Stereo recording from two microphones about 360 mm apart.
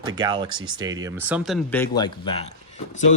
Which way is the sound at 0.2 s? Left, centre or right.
Centre.